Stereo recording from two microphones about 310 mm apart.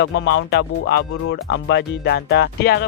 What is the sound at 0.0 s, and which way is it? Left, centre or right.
Speech, left.